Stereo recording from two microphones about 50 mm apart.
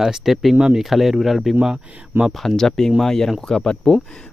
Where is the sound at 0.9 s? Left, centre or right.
Centre.